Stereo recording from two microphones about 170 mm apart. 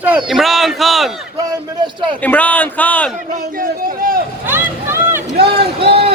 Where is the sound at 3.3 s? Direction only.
55° right (ahead or behind).